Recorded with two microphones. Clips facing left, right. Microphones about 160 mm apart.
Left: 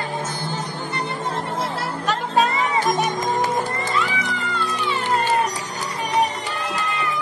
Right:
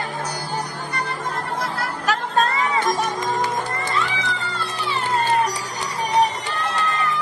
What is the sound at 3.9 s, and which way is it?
Music, centre (ahead or behind).